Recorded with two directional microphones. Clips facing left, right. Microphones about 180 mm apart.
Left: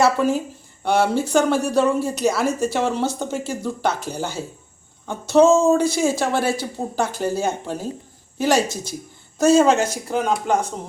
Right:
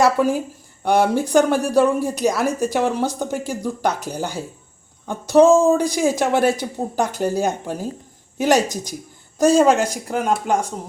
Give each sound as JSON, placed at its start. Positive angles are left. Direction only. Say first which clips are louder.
{"t": 0.0, "sound": "speech", "louder": "right 1 dB", "side_deg": -10}